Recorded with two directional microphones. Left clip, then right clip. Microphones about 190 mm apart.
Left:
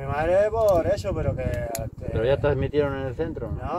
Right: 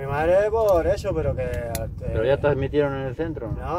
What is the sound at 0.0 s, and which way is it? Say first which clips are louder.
Speech: right 2 dB; 30° right (ahead or behind).